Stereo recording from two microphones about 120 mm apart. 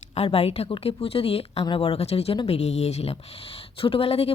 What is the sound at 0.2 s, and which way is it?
Speech, 55° left (ahead or behind).